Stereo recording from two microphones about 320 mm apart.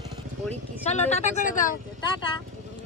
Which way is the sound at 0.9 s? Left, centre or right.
Left.